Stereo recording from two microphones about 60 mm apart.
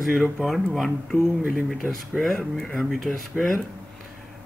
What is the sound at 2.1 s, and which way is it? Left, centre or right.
Speech, centre.